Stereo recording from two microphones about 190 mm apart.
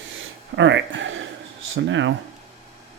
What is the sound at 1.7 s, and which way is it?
Speech, 80° right.